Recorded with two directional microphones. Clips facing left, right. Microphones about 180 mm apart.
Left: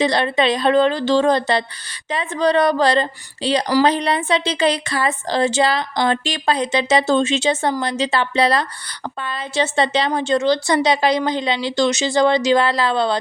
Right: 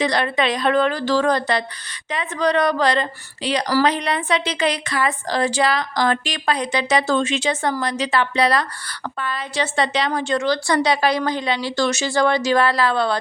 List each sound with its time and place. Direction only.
0.0 s a woman's voice: 25° left (ahead or behind)